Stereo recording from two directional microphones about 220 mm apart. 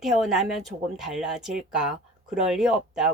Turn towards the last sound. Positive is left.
turn(degrees=0)  # may be behind; listen again after turning